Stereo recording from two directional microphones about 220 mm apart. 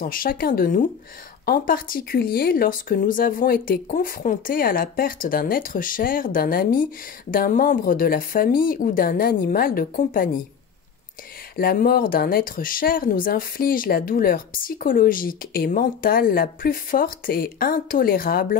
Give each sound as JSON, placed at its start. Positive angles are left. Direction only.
{"t": 0.0, "sound": "speech", "side_deg": 40}
{"t": 11.5, "sound": "speech", "side_deg": 40}